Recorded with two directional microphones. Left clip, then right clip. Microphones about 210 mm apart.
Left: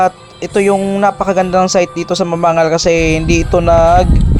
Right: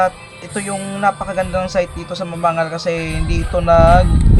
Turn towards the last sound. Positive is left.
turn(degrees=35)  # may be behind; listen again after turning